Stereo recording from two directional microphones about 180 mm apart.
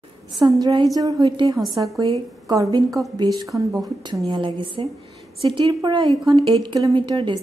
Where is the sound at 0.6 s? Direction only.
25° right (ahead or behind).